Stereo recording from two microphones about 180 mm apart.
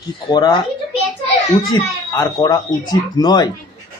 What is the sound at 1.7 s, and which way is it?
A man's voice, 20° left (ahead or behind).